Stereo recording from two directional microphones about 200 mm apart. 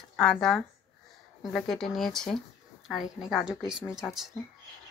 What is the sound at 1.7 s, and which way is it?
Speech, centre (ahead or behind).